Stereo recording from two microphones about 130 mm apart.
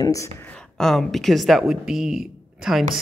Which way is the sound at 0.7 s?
Centre (ahead or behind).